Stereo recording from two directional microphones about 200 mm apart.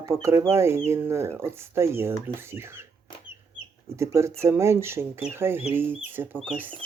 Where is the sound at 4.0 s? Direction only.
15° right (ahead or behind).